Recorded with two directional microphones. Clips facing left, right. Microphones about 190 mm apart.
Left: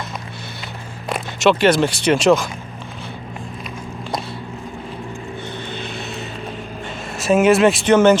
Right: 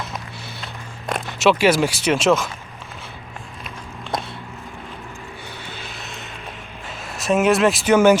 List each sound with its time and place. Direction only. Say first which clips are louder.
1.1 s speech: left 1 dB; 5° right (ahead or behind)
5.7 s vehicle: left 7 dB; 5° right (ahead or behind)
7.2 s speech: left 3 dB; centre (ahead or behind)